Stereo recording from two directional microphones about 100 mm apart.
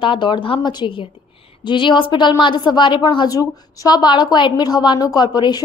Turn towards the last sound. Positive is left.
turn(degrees=45)  # may be behind; listen again after turning